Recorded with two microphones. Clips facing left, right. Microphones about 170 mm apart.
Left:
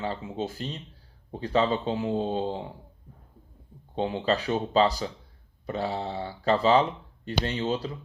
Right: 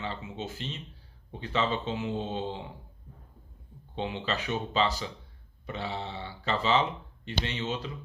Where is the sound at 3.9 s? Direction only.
40° left (ahead or behind).